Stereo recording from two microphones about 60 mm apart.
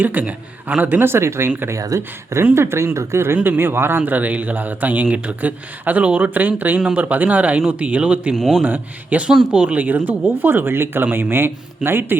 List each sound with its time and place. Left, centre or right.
0.0 s speech: right
1.0 s speech: right
1.7 s speech: right
2.0 s speech: right
3.3 s speech: right
3.6 s speech: right
6.7 s speech: centre
7.0 s speech: right
8.4 s a man's voice: centre
8.6 s speech: right